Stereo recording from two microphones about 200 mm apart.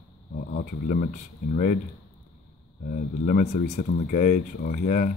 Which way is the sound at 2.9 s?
40° left (ahead or behind).